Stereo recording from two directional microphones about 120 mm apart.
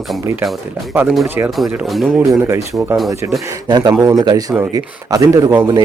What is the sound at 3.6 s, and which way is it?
Speech, 35° right (ahead or behind).